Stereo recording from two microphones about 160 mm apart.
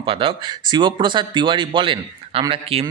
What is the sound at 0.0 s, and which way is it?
Speech, 30° right (ahead or behind).